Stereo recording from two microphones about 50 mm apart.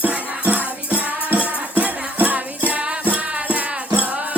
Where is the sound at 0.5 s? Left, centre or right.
Right.